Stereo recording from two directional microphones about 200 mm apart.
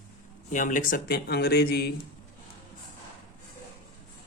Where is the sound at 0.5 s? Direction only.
40° left (ahead or behind).